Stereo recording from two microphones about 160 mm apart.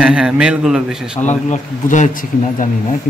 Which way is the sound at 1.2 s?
50° left (ahead or behind).